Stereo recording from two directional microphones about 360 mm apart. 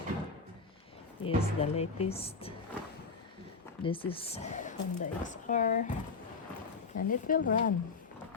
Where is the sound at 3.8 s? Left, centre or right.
Centre.